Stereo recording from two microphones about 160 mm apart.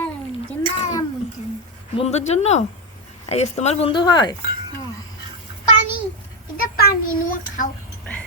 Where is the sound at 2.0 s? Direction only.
45° left (ahead or behind); by 4.4 s 25° left (ahead or behind).